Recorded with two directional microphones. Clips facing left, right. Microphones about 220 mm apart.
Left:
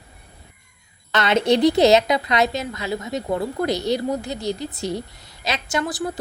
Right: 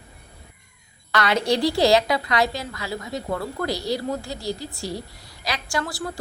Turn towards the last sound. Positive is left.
turn(degrees=20)  # may be behind; listen again after turning